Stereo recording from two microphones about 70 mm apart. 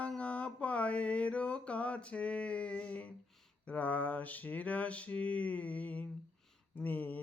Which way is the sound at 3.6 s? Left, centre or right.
Left.